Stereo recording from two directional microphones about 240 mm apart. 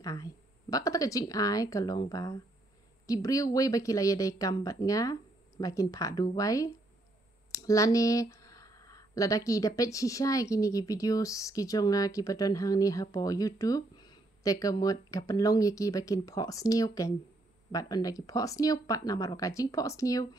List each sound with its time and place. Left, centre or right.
0.0 s speech: centre